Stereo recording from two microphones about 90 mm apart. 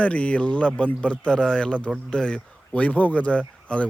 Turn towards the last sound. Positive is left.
turn(degrees=15)  # may be behind; listen again after turning